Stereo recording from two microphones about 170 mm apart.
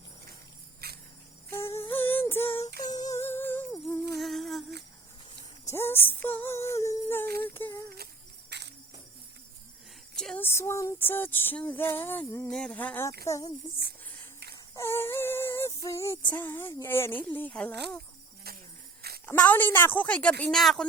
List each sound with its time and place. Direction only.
0.8 s cricket: 65° right (ahead or behind)
1.5 s female singing: 15° left (ahead or behind)
3.1 s humming: 15° left (ahead or behind)
4.2 s humming: centre (ahead or behind)
5.6 s a sound: 15° left (ahead or behind)
8.4 s cricket: 85° right
10.2 s female singing: 5° left (ahead or behind)
13.2 s speech: 20° left (ahead or behind)
14.8 s child singing: 15° left (ahead or behind)
18.5 s a sound: 65° right (ahead or behind)
19.2 s a woman's voice: 10° left (ahead or behind)